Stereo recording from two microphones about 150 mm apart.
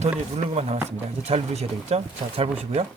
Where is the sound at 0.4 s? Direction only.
45° right (ahead or behind).